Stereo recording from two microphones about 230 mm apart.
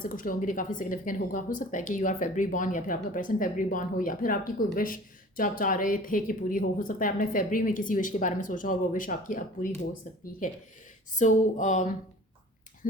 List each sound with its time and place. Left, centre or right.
0.0 s a woman's voice: left